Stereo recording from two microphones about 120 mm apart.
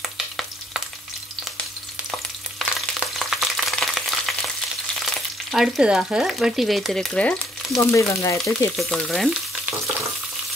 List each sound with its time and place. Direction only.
0.0 s frying: 5° right (ahead or behind)
2.6 s frying: centre (ahead or behind)
7.7 s speech: 25° left (ahead or behind)
8.7 s frying: centre (ahead or behind)